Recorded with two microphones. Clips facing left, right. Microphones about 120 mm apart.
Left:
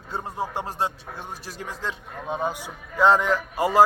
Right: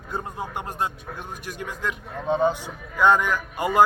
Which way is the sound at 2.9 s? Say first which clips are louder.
Left 1 dB; 30° left (ahead or behind).